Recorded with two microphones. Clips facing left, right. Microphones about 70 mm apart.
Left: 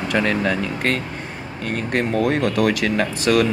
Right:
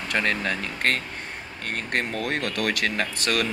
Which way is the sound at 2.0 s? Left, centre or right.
Left.